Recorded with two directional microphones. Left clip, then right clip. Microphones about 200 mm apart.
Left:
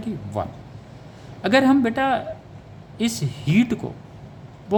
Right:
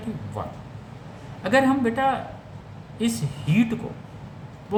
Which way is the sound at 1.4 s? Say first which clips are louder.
Left 3 dB; 60° left (ahead or behind).